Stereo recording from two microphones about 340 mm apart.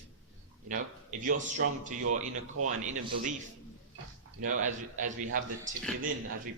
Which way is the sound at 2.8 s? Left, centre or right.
Right.